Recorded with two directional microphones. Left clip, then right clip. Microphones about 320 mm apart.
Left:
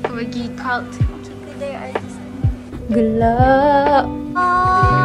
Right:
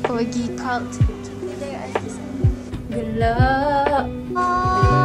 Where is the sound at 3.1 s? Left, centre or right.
Centre.